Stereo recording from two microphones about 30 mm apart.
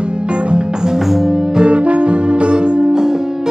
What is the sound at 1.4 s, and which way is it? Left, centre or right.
Music, right.